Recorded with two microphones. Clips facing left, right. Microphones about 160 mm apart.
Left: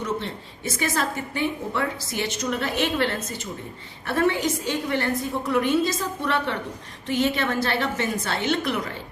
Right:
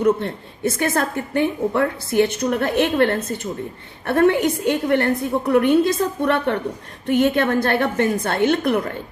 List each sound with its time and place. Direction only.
0.0 s a woman's voice: 55° right (ahead or behind)